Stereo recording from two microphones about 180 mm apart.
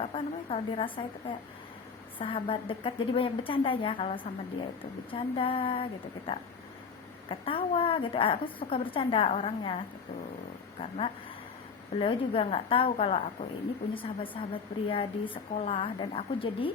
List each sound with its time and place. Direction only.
0.0 s a woman's voice: 30° left (ahead or behind)
2.1 s a woman's voice: 30° left (ahead or behind)